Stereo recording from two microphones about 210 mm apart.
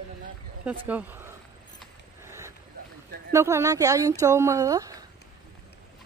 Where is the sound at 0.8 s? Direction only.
10° right (ahead or behind).